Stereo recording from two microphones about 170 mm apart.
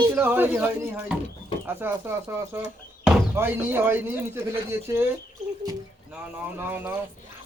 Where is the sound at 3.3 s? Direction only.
15° right (ahead or behind).